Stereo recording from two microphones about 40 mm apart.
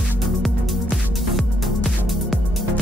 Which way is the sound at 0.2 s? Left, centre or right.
Centre.